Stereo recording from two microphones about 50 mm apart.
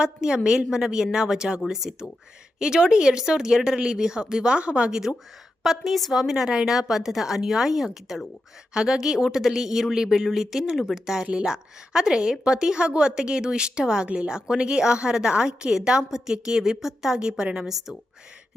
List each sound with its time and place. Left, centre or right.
0.0 s a woman's voice: centre
5.6 s a woman's voice: centre